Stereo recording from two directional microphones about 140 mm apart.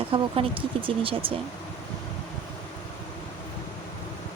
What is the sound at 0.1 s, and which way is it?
Speech, 40° right (ahead or behind).